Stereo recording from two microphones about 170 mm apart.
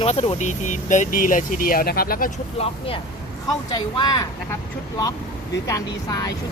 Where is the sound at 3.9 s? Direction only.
25° left (ahead or behind).